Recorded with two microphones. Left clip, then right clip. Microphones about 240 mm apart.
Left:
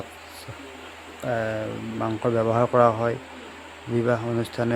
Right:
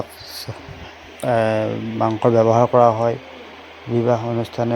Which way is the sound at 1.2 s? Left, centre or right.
Right.